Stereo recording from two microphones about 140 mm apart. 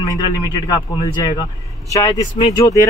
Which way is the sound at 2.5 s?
25° left (ahead or behind).